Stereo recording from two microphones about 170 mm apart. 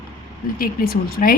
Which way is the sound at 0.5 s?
60° left (ahead or behind).